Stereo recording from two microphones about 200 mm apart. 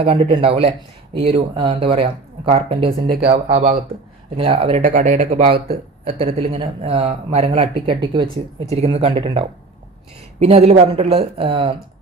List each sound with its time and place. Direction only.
0.0 s speech: 25° right (ahead or behind)
10.4 s speech: 30° right (ahead or behind)